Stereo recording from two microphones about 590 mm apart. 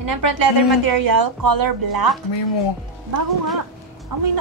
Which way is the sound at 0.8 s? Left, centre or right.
Right.